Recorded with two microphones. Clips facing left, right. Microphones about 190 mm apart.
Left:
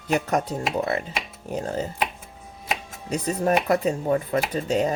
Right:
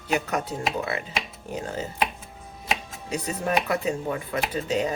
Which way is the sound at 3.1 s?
40° left (ahead or behind).